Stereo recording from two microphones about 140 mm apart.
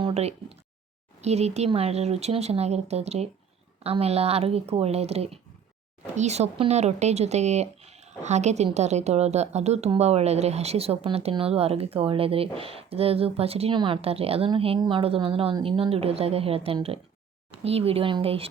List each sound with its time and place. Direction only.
0.0 s speech: 50° right (ahead or behind)